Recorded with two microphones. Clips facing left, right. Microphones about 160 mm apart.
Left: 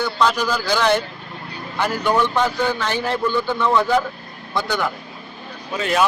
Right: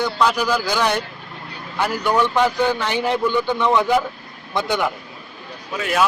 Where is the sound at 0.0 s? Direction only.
10° right (ahead or behind).